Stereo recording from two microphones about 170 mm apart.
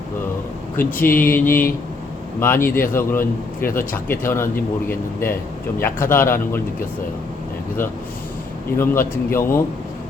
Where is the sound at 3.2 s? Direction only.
55° left (ahead or behind).